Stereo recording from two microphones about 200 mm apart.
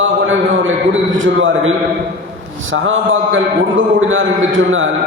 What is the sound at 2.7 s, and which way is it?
A man's voice, 75° right (ahead or behind).